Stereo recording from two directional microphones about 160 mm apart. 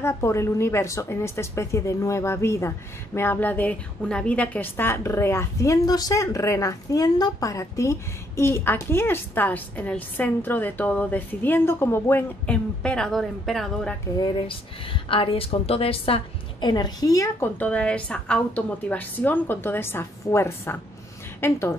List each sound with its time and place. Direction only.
0.0 s a woman's voice: 15° left (ahead or behind); by 13.9 s centre (ahead or behind)
14.1 s speech: 30° left (ahead or behind)
16.6 s a woman's voice: 25° left (ahead or behind)